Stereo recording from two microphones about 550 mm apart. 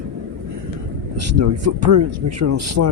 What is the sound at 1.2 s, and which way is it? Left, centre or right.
Speech, right.